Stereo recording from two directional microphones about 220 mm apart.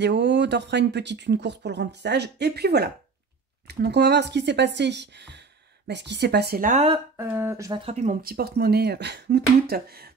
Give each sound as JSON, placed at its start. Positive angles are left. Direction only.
{"t": 0.0, "sound": "speech", "side_deg": -50}
{"t": 7.2, "sound": "speech", "side_deg": -10}
{"t": 7.8, "sound": "speech", "side_deg": -30}